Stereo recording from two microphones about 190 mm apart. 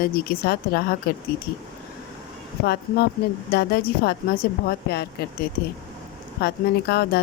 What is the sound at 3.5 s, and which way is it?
Speech, 55° left (ahead or behind).